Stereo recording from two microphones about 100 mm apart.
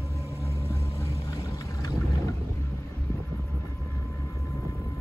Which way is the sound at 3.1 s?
25° left (ahead or behind).